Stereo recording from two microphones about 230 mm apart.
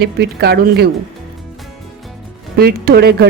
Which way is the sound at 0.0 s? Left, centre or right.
Right.